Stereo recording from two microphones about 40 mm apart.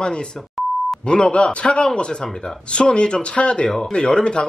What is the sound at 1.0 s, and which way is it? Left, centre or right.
Speech, left.